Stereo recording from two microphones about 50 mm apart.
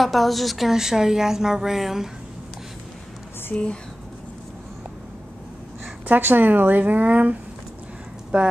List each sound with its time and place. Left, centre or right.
0.0 s a woman's voice: centre
6.0 s a woman's voice: right
8.3 s speech: right